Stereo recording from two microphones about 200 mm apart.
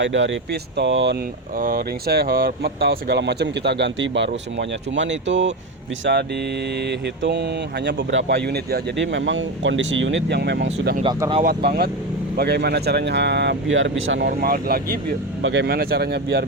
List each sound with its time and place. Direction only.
0.0 s speech: 65° right (ahead or behind)
1.5 s speech: 50° right (ahead or behind); by 5.5 s 65° right (ahead or behind)
6.7 s speech: 55° right (ahead or behind)
11.0 s speech: 25° right (ahead or behind)
11.4 s speech: 50° right (ahead or behind)
14.3 s speech: 50° right (ahead or behind)
15.4 s speech: 65° right (ahead or behind)